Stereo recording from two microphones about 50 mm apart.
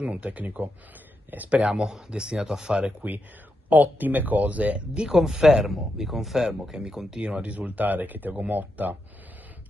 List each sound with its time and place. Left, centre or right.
0.0 s speech: right
1.5 s speech: centre
3.0 s speech: right